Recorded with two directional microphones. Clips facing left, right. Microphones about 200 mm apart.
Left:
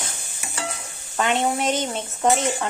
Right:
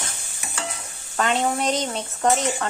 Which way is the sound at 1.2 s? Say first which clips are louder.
Even; centre (ahead or behind).